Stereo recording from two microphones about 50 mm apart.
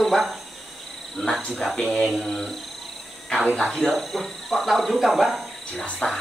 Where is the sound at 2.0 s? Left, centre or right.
Centre.